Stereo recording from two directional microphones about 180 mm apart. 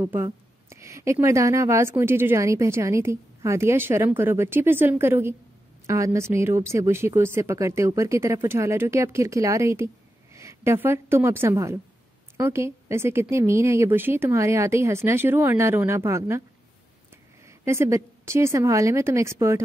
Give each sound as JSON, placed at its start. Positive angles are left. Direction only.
{"t": 0.0, "sound": "a sound", "side_deg": -15}
{"t": 1.2, "sound": "a woman's voice", "side_deg": -15}
{"t": 17.5, "sound": "speech", "side_deg": -15}